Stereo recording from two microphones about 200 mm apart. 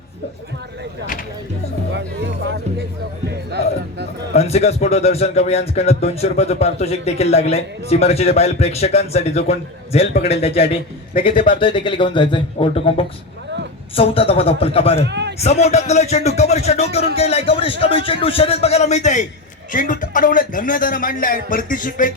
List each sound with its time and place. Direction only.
1.9 s speech: 65° right (ahead or behind)
4.4 s a man's voice: 30° left (ahead or behind)
15.0 s a man's voice: 60° right (ahead or behind)
15.4 s a man's voice: 35° left (ahead or behind)